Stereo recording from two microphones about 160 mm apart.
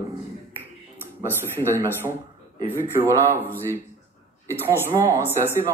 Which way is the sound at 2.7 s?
15° right (ahead or behind).